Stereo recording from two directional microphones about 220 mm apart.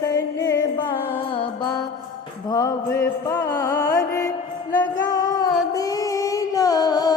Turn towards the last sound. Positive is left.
turn(degrees=15)  # may be behind; listen again after turning